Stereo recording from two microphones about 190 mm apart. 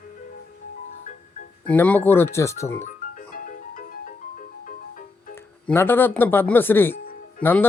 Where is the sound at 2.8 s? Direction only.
45° left (ahead or behind).